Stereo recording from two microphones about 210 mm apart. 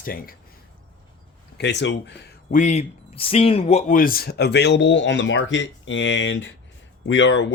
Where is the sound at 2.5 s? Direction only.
35° left (ahead or behind).